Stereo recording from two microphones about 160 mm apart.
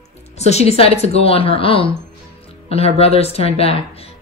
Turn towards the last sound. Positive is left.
turn(degrees=40)  # may be behind; listen again after turning